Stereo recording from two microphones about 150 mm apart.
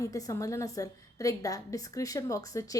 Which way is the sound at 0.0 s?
25° left (ahead or behind).